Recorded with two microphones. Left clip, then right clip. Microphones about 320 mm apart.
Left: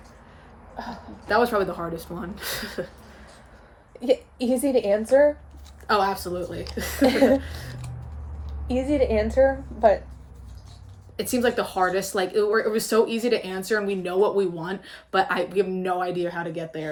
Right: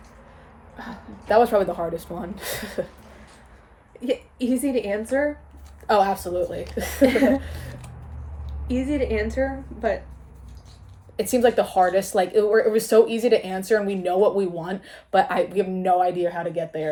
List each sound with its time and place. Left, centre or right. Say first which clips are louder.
1.3 s speech: right 4 dB; centre
4.0 s a woman's voice: left 3 dB; centre
5.9 s speech: right 3 dB; centre
7.0 s a woman's voice: right 1 dB; centre
7.3 s speech: left 2 dB; centre
8.6 s a woman's voice: left 2 dB; centre
11.2 s speech: right 4 dB; centre